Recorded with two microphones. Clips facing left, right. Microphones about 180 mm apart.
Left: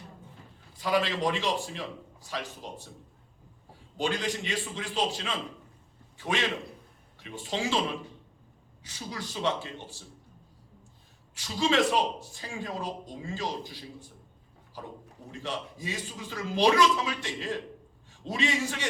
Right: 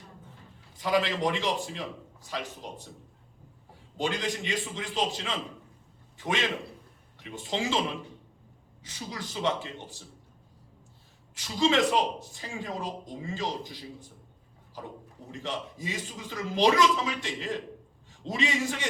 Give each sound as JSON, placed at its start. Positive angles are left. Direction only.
{"t": 0.8, "sound": "a man's voice", "side_deg": -15}
{"t": 3.9, "sound": "a man's voice", "side_deg": -20}
{"t": 11.3, "sound": "a man's voice", "side_deg": -20}
{"t": 15.3, "sound": "a man's voice", "side_deg": -20}